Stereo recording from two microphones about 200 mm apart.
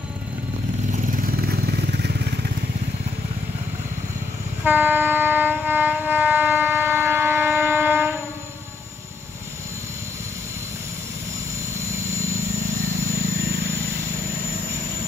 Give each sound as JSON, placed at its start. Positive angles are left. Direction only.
{"t": 0.9, "sound": "vehicle", "side_deg": -45}
{"t": 4.6, "sound": "train", "side_deg": -10}